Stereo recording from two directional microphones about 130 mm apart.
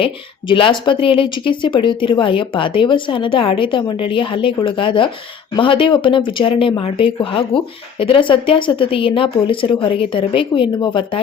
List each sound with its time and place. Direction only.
0.0 s speech: 40° left (ahead or behind)